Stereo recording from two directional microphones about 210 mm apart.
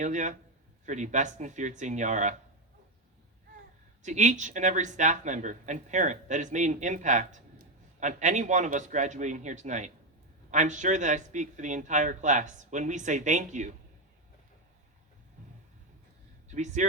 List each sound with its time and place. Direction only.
0.0 s speech: 35° right (ahead or behind)
4.0 s speech: 35° right (ahead or behind)
16.5 s a man's voice: 35° right (ahead or behind)